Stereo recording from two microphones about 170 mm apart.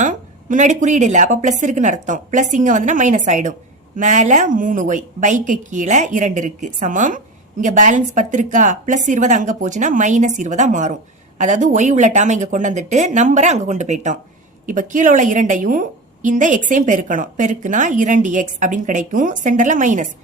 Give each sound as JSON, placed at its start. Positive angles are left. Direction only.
{"t": 0.0, "sound": "a woman's voice", "side_deg": -50}